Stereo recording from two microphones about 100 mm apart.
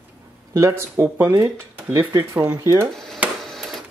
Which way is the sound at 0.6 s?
25° right (ahead or behind).